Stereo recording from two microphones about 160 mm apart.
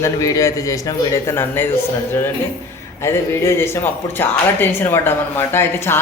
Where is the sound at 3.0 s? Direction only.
15° left (ahead or behind).